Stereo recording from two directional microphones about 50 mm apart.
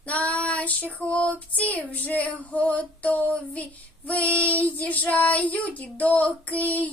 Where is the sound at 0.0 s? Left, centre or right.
Left.